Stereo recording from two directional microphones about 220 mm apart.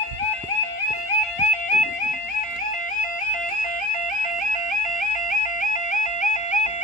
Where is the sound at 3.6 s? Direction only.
35° left (ahead or behind).